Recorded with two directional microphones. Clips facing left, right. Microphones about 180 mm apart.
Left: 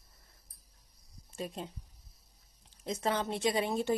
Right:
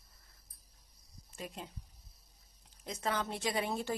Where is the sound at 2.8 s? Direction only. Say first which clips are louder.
Left 4 dB; 25° left (ahead or behind).